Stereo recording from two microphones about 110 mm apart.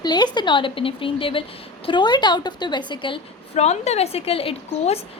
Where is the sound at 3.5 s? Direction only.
80° left; by 4.9 s 60° left (ahead or behind).